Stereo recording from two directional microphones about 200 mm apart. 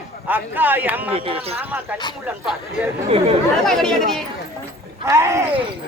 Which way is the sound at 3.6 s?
Centre (ahead or behind).